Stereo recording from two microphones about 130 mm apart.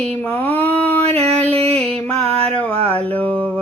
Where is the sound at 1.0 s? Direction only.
50° right (ahead or behind).